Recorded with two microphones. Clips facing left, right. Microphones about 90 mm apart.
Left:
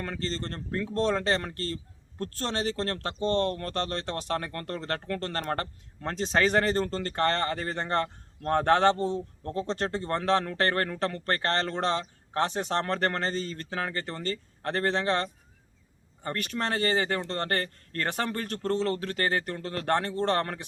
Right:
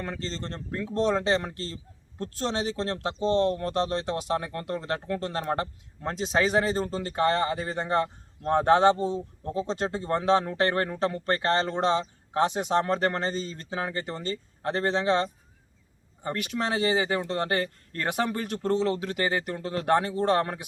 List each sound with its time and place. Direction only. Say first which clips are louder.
0.0 s speech: left 1 dB; 20° right (ahead or behind)